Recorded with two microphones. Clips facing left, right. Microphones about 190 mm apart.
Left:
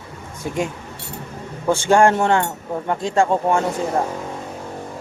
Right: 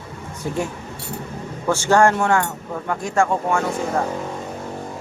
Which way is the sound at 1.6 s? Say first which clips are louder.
Left 1 dB; 15° left (ahead or behind).